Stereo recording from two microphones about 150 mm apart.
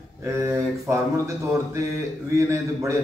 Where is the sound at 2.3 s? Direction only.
20° right (ahead or behind).